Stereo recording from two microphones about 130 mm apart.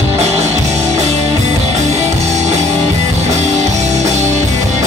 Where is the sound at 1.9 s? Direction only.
60° right (ahead or behind).